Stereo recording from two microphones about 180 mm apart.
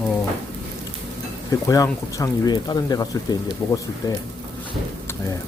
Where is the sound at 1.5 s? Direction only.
20° left (ahead or behind).